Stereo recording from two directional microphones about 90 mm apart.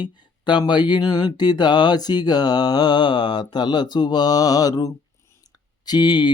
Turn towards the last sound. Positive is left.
turn(degrees=55)  # may be behind; listen again after turning